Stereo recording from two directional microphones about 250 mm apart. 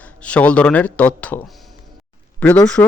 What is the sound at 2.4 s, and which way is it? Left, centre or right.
Speech, centre.